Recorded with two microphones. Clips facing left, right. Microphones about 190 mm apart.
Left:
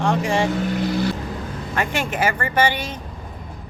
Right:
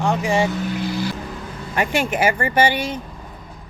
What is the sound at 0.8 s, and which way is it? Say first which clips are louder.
Vehicle: left 3 dB; 60° left (ahead or behind).